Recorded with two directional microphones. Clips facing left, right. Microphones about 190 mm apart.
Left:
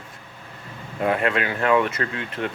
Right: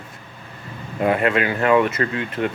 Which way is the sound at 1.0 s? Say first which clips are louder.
Right 3 dB; 10° right (ahead or behind).